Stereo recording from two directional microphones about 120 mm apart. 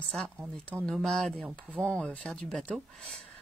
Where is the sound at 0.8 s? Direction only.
5° left (ahead or behind).